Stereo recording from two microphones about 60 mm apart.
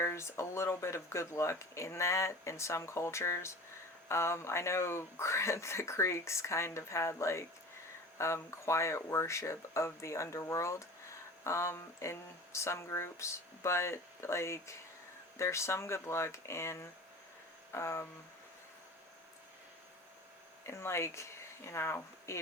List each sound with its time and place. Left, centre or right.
0.0 s speech: left
17.7 s a sound: left
20.7 s speech: left